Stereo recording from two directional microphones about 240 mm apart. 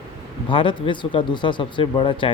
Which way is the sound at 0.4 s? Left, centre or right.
Left.